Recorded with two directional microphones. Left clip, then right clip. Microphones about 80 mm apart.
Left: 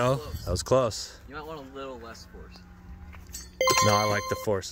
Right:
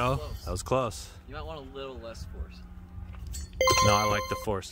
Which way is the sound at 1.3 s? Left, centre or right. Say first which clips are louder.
Right 2 dB; centre.